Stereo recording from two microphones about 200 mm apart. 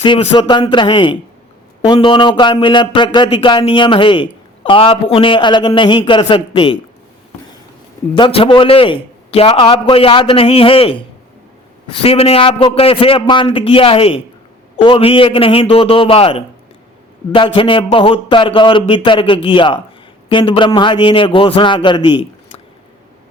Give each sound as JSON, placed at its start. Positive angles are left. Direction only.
{"t": 0.0, "sound": "speech", "side_deg": 25}
{"t": 8.1, "sound": "speech", "side_deg": 25}